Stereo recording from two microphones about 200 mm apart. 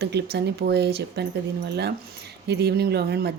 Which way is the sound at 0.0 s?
55° right (ahead or behind).